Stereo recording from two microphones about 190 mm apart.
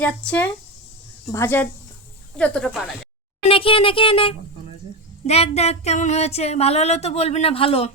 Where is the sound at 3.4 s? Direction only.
30° left (ahead or behind).